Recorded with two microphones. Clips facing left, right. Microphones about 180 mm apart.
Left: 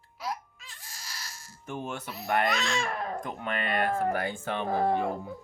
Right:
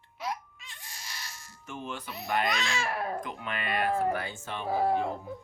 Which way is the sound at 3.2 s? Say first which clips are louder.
Left 3 dB; 55° left (ahead or behind).